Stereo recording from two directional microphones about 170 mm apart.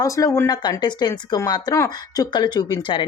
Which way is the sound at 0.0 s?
20° left (ahead or behind).